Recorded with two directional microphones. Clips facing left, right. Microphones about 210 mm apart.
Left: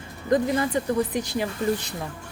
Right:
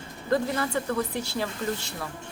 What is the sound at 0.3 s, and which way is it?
Speech, 15° left (ahead or behind).